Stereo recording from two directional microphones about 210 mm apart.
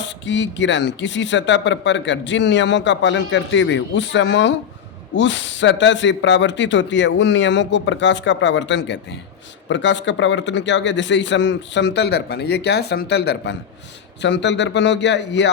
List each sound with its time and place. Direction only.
0.0 s speech: 60° left (ahead or behind)